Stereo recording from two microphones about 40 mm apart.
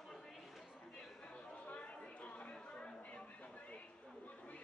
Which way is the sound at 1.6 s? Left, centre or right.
Left.